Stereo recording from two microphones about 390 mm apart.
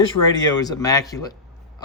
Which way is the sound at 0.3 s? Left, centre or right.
Centre.